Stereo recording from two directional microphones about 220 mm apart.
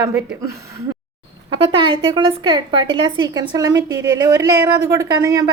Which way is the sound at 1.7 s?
25° right (ahead or behind).